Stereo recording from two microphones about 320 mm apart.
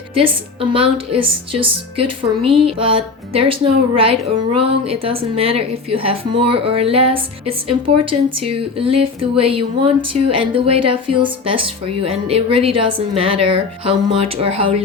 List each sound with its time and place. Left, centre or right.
0.1 s speech: centre
10.0 s speech: right
10.3 s speech: centre